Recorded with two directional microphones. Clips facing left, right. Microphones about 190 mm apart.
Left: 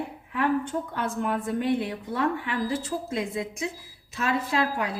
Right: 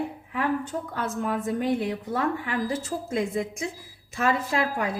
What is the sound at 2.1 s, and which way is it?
A woman's voice, 45° right (ahead or behind).